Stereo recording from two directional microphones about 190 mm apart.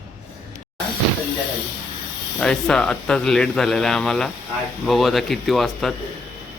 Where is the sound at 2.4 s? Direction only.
5° left (ahead or behind).